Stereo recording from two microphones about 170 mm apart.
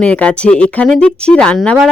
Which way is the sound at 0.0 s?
5° left (ahead or behind).